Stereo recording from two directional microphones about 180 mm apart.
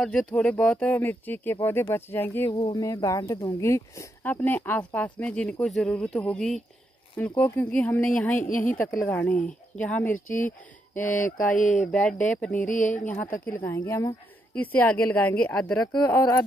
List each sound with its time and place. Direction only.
0.0 s speech: 5° left (ahead or behind)
2.5 s speech: 25° left (ahead or behind); by 8.5 s 10° left (ahead or behind)
8.5 s mantra: 45° left (ahead or behind)
8.7 s speech: 10° left (ahead or behind)
11.1 s mantra: 50° left (ahead or behind)
11.8 s speech: 5° left (ahead or behind)
12.6 s mantra: 45° left (ahead or behind)
12.9 s speech: 10° left (ahead or behind)